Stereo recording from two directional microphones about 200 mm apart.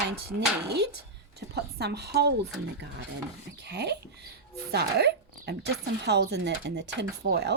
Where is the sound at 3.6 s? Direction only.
60° right (ahead or behind).